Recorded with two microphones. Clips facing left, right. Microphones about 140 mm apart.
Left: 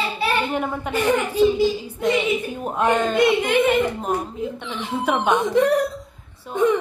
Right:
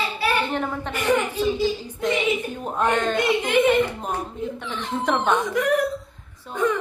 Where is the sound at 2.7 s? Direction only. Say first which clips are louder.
Left 2 dB; 10° left (ahead or behind).